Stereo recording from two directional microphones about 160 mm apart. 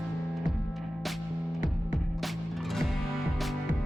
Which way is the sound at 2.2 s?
Centre (ahead or behind).